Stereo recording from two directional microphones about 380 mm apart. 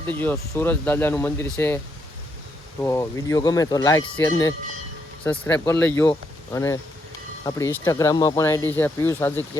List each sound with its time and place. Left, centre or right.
0.2 s speech: centre
2.8 s speech: centre